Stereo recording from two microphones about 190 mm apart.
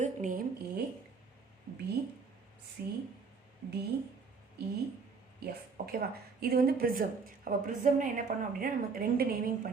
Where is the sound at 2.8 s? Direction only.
55° right (ahead or behind).